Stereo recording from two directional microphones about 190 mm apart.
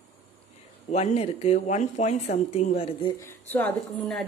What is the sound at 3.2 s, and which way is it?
Speech, 10° left (ahead or behind).